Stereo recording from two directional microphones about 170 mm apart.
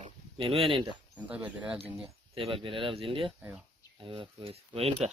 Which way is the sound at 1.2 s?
10° right (ahead or behind).